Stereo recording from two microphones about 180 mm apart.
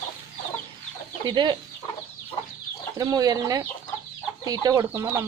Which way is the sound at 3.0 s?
20° right (ahead or behind).